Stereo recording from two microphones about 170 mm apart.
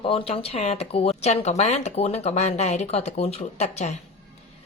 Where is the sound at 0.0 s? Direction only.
30° left (ahead or behind).